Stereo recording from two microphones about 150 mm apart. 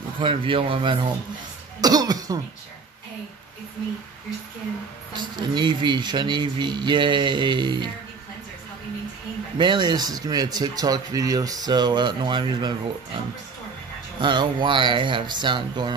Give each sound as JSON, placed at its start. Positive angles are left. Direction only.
{"t": 0.2, "sound": "speech", "side_deg": -35}
{"t": 5.1, "sound": "speech", "side_deg": -30}
{"t": 9.6, "sound": "speech", "side_deg": -30}
{"t": 14.2, "sound": "speech", "side_deg": -30}